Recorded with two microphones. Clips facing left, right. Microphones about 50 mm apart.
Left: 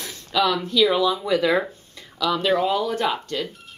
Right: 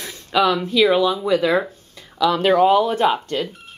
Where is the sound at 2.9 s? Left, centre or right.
Right.